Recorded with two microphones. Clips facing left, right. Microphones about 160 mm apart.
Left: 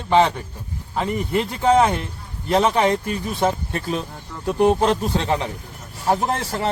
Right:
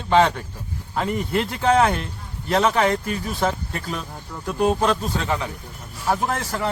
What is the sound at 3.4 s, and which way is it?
Speech, 25° left (ahead or behind).